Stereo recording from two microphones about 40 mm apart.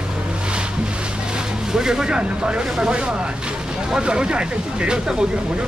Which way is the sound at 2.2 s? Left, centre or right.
Right.